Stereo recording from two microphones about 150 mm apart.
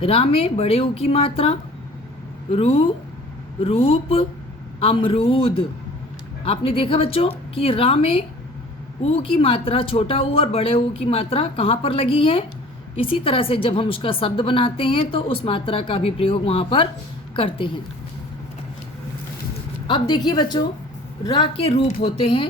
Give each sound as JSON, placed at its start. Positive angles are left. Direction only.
{"t": 0.0, "sound": "a woman's voice", "side_deg": 40}
{"t": 19.9, "sound": "a woman's voice", "side_deg": 30}